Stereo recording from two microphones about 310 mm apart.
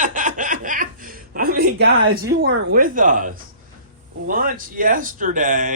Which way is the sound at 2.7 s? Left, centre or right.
Right.